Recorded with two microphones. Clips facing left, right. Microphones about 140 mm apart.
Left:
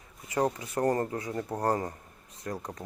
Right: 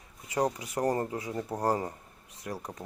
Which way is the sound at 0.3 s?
15° right (ahead or behind).